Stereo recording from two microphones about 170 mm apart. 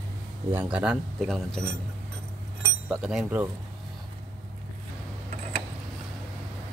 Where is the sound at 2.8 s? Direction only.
5° right (ahead or behind).